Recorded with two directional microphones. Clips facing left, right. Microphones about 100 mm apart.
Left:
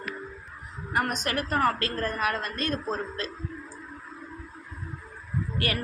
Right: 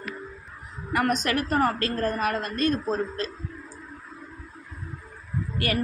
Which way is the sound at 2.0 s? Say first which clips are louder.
Right 3 dB; 30° right (ahead or behind).